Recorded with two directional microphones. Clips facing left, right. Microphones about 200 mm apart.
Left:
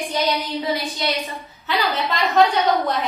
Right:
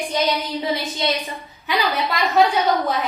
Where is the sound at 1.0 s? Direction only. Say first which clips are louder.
Right 3 dB; 25° right (ahead or behind).